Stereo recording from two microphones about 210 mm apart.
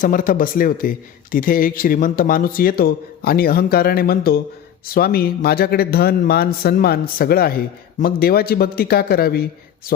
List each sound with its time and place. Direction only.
0.0 s a man's voice: 40° left (ahead or behind)